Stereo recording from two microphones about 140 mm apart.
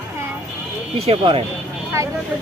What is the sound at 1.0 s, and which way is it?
Speech, 45° right (ahead or behind).